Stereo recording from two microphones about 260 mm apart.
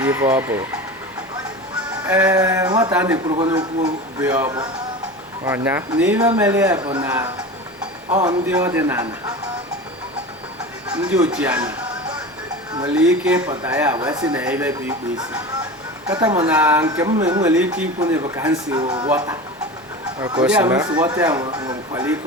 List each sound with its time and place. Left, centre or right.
0.0 s a man's voice: centre
2.0 s a man's voice: centre
3.3 s a man's voice: centre
8.3 s a man's voice: centre
11.0 s speech: centre
12.9 s a man's voice: centre
14.3 s speech: centre
16.0 s a man's voice: centre
17.5 s a man's voice: centre